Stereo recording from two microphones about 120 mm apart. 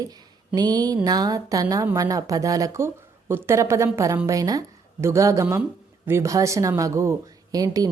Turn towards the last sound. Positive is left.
turn(degrees=-30)  # may be behind; listen again after turning